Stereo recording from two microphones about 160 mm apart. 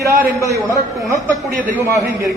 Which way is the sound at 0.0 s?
20° right (ahead or behind).